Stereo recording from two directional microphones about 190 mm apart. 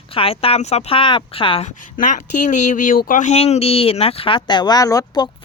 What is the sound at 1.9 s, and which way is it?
Speech, 40° left (ahead or behind).